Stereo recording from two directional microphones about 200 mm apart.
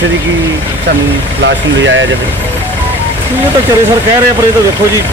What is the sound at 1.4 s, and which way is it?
Speech, 65° right (ahead or behind).